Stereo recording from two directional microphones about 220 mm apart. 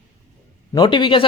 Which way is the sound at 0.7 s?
20° left (ahead or behind).